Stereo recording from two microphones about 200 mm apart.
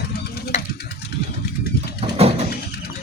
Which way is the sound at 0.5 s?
35° left (ahead or behind).